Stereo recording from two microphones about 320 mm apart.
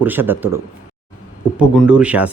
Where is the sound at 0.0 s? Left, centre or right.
Centre.